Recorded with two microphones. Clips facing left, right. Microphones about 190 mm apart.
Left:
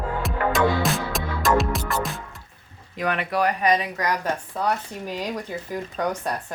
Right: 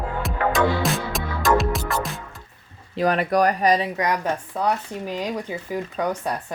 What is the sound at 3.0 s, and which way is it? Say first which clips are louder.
Speech: right 5 dB; 35° right (ahead or behind).